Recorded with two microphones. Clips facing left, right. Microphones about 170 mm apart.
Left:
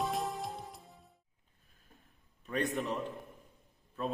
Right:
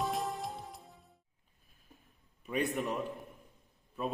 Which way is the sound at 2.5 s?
15° right (ahead or behind).